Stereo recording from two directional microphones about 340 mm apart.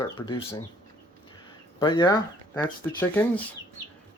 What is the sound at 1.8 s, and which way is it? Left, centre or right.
Speech, centre.